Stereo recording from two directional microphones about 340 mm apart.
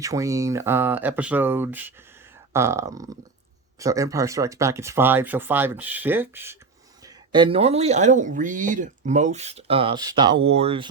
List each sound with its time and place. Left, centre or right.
0.0 s speech: centre